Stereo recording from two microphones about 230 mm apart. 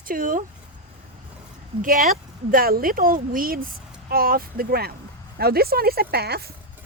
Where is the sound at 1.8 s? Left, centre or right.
Right.